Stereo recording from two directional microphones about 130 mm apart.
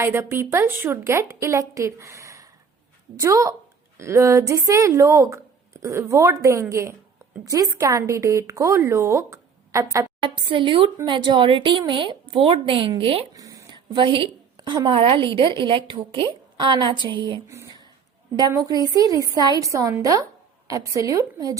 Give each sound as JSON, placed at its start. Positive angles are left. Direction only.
{"t": 0.0, "sound": "a woman's voice", "side_deg": -15}
{"t": 10.2, "sound": "a woman's voice", "side_deg": -40}
{"t": 13.3, "sound": "a woman's voice", "side_deg": -25}
{"t": 17.5, "sound": "a sound", "side_deg": -20}
{"t": 18.3, "sound": "a woman's voice", "side_deg": -25}